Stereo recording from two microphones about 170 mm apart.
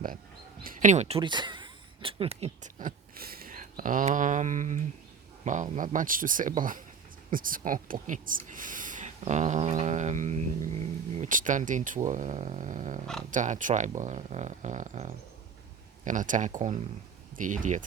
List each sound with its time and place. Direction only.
0.6 s speech: 50° right (ahead or behind); by 2.5 s 35° right (ahead or behind)
2.7 s speech: 55° right (ahead or behind)